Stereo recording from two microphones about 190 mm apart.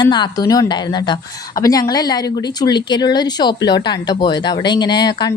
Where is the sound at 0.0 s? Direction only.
20° left (ahead or behind).